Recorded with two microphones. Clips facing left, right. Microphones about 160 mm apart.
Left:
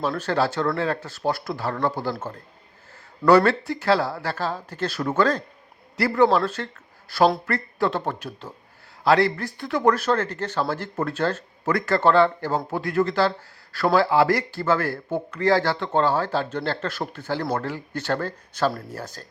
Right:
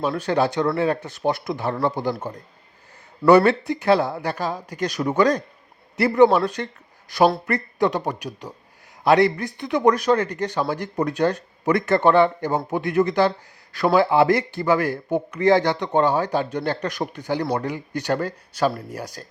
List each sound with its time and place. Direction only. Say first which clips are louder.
0.2 s speech: right 2 dB; 15° right (ahead or behind)
3.2 s a man's voice: right 2 dB; 20° right (ahead or behind)